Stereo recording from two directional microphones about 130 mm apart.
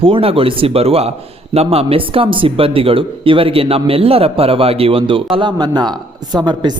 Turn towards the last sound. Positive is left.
turn(degrees=-35)  # may be behind; listen again after turning